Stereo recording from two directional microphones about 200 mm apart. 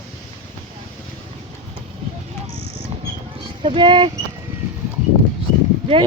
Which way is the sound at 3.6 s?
25° right (ahead or behind).